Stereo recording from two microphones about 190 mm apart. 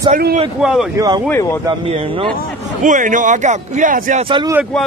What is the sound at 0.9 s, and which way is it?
Speech, 20° right (ahead or behind).